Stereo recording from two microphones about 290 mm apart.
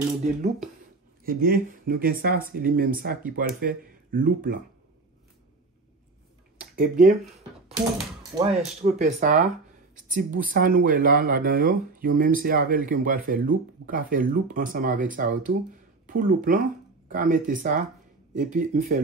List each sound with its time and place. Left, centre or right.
1.2 s speech: right
6.7 s speech: right
8.5 s speech: right